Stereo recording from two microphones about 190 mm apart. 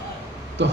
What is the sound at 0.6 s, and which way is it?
Speech, 70° right (ahead or behind).